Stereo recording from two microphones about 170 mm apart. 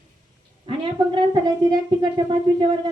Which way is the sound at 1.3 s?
25° right (ahead or behind).